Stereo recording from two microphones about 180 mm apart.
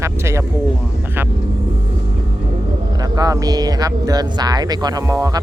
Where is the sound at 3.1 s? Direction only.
20° right (ahead or behind).